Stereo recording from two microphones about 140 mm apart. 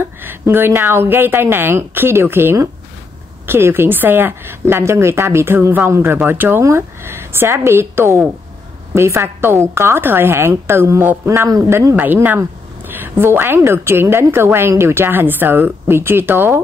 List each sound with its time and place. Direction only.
0.0 s a woman's voice: 15° right (ahead or behind)